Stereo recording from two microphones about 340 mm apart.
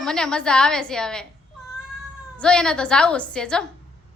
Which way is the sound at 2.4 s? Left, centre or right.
Centre.